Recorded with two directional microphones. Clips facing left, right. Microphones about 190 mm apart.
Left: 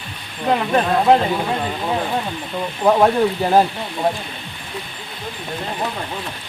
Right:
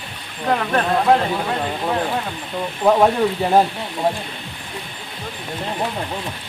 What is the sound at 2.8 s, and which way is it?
Speech, centre (ahead or behind).